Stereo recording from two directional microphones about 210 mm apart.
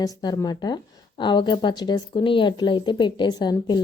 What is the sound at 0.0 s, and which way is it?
A woman's voice, 20° left (ahead or behind).